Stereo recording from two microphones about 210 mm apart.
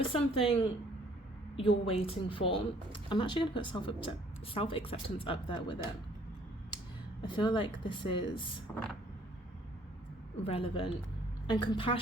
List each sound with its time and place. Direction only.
0.1 s speech: 25° left (ahead or behind)
1.9 s speech: 25° left (ahead or behind)
7.2 s speech: 20° left (ahead or behind)
8.7 s vehicle: 5° left (ahead or behind)
10.4 s speech: 25° left (ahead or behind)